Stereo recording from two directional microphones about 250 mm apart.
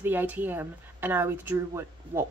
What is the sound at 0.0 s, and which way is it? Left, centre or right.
Speech, centre.